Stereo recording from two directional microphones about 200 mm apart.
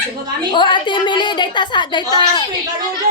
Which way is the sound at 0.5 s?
25° left (ahead or behind).